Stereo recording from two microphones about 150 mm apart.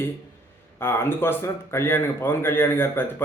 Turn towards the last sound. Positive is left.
turn(degrees=15)  # may be behind; listen again after turning